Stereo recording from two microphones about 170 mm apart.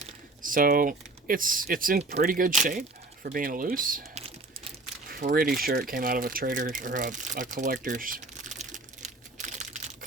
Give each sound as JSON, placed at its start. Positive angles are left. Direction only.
{"t": 0.4, "sound": "speech", "side_deg": -55}